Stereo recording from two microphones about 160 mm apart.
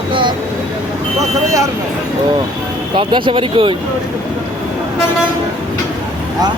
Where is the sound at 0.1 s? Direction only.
30° right (ahead or behind).